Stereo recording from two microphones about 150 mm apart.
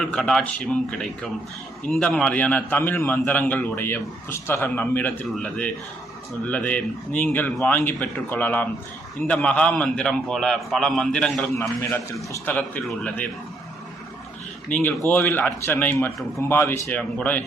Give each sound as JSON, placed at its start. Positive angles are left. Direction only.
{"t": 0.0, "sound": "a man's voice", "side_deg": 5}
{"t": 11.5, "sound": "a man's voice", "side_deg": 15}
{"t": 14.7, "sound": "a man's voice", "side_deg": 10}